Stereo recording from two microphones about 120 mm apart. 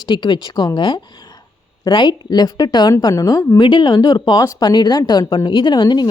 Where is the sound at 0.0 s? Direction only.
35° left (ahead or behind).